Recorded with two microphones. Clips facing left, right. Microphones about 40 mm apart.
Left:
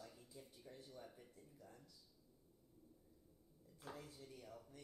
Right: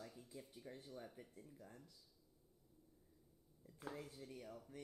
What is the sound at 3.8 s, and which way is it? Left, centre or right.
Speech, centre.